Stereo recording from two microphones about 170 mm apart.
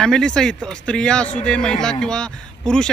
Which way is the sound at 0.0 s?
5° left (ahead or behind).